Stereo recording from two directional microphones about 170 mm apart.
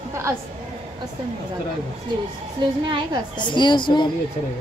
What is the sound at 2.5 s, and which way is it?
Speech, 25° right (ahead or behind).